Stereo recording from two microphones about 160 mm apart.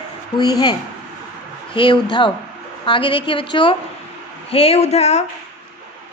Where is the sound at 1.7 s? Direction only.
30° left (ahead or behind).